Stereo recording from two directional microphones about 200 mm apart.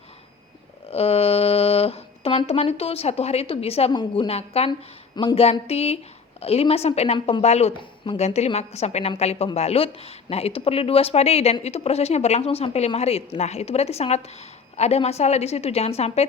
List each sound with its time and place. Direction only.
0.9 s a woman's voice: 30° left (ahead or behind)